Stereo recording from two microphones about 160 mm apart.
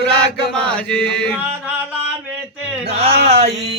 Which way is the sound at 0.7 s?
5° left (ahead or behind).